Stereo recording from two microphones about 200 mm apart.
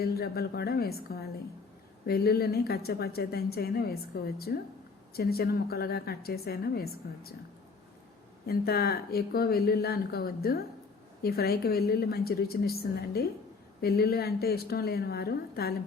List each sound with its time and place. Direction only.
0.0 s speech: 50° left (ahead or behind)
8.4 s speech: 50° left (ahead or behind)